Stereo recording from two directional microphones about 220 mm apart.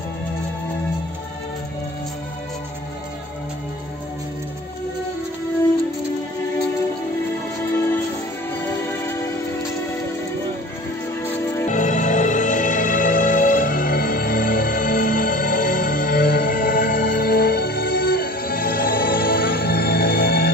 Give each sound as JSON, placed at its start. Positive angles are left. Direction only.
{"t": 11.6, "sound": "music", "side_deg": 35}